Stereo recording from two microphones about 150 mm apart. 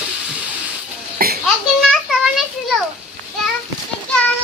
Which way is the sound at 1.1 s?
90° right.